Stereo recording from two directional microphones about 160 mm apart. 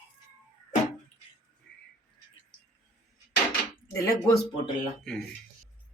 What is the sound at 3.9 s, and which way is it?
Speech, 20° left (ahead or behind).